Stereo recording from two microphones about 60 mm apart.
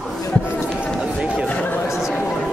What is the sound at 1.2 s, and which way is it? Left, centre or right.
Chatter, centre.